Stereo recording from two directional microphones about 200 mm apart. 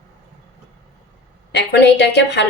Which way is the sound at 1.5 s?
55° left (ahead or behind).